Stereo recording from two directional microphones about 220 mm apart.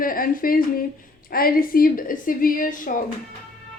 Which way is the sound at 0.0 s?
40° left (ahead or behind).